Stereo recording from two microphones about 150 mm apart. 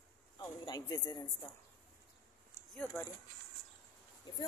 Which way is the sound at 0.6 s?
30° left (ahead or behind).